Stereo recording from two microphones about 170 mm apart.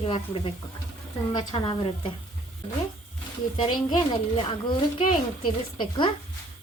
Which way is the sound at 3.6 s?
25° left (ahead or behind).